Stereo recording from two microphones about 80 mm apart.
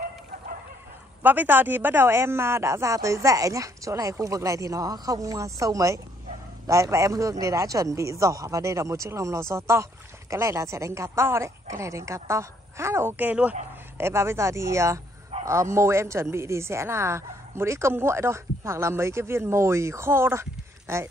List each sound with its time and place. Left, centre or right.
1.2 s a woman's voice: right
13.2 s speech: centre
14.0 s a woman's voice: right